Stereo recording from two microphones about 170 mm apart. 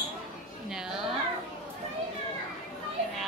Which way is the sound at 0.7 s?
5° right (ahead or behind).